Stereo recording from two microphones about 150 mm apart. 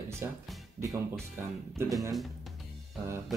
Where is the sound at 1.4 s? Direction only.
15° right (ahead or behind).